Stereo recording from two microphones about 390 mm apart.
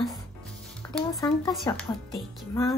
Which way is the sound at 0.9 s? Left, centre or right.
Centre.